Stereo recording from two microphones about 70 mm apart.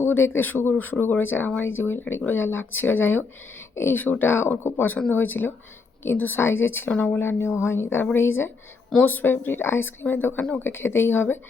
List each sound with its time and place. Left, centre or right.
0.0 s speech: left
7.2 s speech: left